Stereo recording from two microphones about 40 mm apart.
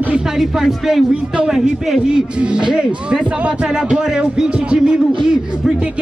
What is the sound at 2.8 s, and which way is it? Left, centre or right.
A man's voice, right.